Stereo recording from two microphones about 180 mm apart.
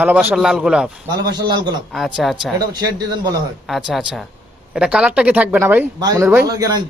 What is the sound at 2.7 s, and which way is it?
Speech, 25° right (ahead or behind).